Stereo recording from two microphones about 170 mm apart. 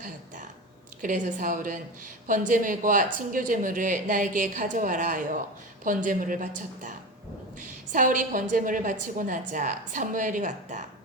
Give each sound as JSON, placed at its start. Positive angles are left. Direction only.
{"t": 1.0, "sound": "a woman's voice", "side_deg": -50}